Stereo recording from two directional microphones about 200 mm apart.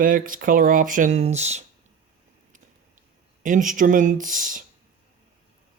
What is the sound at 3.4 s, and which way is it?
Speech, 40° right (ahead or behind).